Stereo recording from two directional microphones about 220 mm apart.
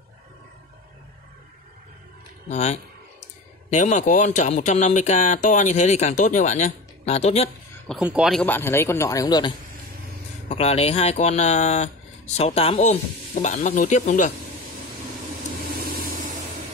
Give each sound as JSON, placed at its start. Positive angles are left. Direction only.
{"t": 2.4, "sound": "speech", "side_deg": 30}
{"t": 7.9, "sound": "speech", "side_deg": -5}
{"t": 10.5, "sound": "speech", "side_deg": 30}